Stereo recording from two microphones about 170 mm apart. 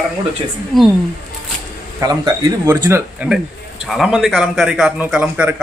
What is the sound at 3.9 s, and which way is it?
A man's voice, centre (ahead or behind).